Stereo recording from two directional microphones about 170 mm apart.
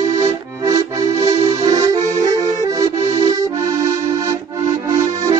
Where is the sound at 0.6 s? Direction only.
20° right (ahead or behind).